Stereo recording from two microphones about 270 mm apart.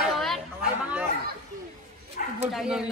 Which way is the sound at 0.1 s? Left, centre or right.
Centre.